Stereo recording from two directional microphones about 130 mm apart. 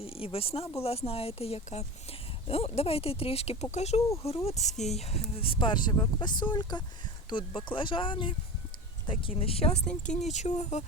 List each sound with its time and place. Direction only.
0.0 s speech: 45° left (ahead or behind)